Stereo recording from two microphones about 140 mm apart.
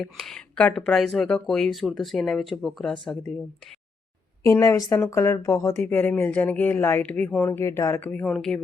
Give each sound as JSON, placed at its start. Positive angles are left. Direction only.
{"t": 0.0, "sound": "speech", "side_deg": 0}
{"t": 4.4, "sound": "speech", "side_deg": 20}